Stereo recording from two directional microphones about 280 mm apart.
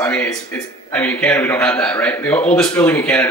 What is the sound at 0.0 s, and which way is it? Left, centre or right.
A man's voice, centre.